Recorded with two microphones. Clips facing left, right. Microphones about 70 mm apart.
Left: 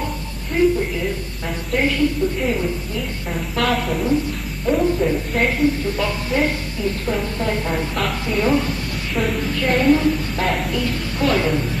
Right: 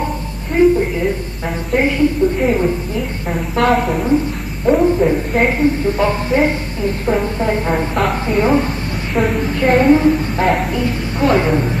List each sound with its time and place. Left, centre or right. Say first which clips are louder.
0.6 s a sound: right 5 dB; right
1.7 s a woman's voice: right 4 dB; right
3.3 s a woman's voice: right 6 dB; centre
4.6 s a woman's voice: right 6 dB; right
9.2 s a woman's voice: right 5 dB; centre
9.5 s a woman's voice: right 5 dB; right
10.4 s a woman's voice: right 6 dB; centre
10.7 s a woman's voice: right 4 dB; right